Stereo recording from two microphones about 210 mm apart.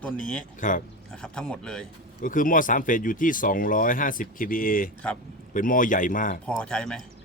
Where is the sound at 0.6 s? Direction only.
40° left (ahead or behind).